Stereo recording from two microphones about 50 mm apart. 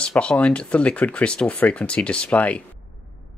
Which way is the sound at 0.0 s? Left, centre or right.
Left.